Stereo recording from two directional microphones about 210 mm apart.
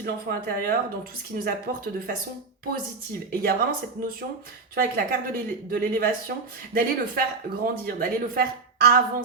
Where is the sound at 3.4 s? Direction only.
45° right (ahead or behind).